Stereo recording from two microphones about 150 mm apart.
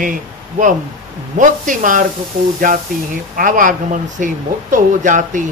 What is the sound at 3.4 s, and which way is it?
Speech, 65° right (ahead or behind).